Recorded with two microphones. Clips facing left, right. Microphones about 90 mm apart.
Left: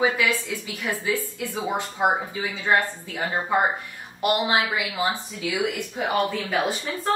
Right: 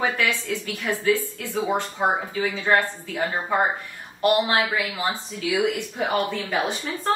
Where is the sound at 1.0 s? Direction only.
15° left (ahead or behind).